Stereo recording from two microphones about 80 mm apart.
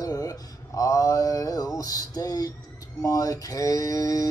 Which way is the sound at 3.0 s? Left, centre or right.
Left.